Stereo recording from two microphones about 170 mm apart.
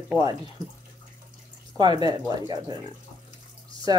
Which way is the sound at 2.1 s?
25° right (ahead or behind).